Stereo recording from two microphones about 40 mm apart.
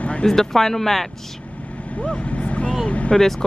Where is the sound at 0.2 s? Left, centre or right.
Centre.